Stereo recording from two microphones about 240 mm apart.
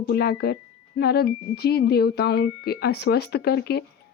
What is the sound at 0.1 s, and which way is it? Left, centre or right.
Speech, left.